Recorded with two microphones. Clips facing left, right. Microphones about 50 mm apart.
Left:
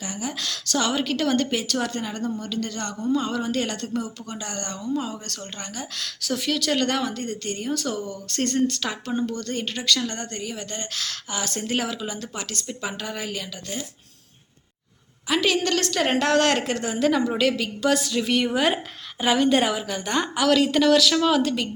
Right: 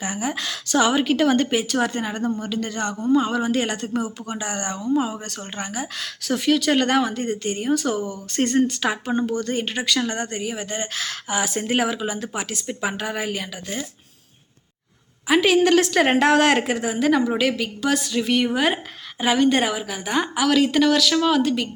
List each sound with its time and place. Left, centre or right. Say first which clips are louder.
0.0 s a woman's voice: right 4 dB; right
15.3 s a woman's voice: right 6 dB; centre